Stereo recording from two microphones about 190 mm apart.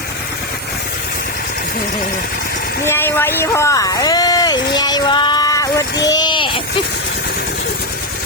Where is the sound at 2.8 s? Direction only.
10° left (ahead or behind).